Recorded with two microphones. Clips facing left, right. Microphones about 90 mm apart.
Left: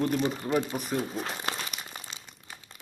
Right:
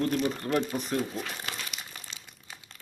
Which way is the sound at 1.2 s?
30° left (ahead or behind).